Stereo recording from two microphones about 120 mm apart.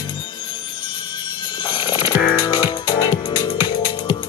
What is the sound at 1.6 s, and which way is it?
Music, 40° left (ahead or behind).